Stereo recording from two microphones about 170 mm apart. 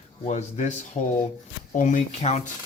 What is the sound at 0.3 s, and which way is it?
Speech, 45° left (ahead or behind).